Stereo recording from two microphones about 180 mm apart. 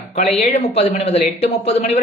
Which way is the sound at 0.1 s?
40° left (ahead or behind).